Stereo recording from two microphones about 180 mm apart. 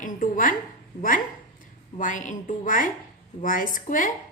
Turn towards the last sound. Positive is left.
turn(degrees=45)  # may be behind; listen again after turning